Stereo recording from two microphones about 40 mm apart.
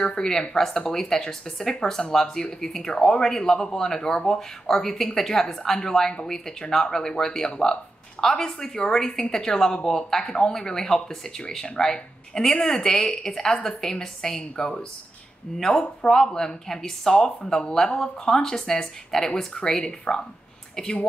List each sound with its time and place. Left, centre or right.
0.0 s speech: centre